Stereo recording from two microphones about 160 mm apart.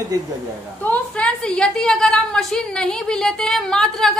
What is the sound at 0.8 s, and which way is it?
A woman's voice, 10° left (ahead or behind).